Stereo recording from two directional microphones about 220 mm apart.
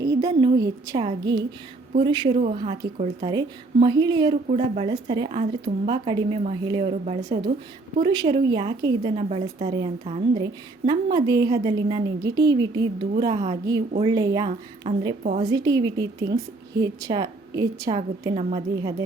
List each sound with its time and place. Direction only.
0.0 s a woman's voice: 15° right (ahead or behind)
4.4 s a woman's voice: 30° right (ahead or behind)
7.2 s a woman's voice: 15° right (ahead or behind)
14.8 s a woman's voice: 30° right (ahead or behind)
15.4 s a woman's voice: 20° right (ahead or behind)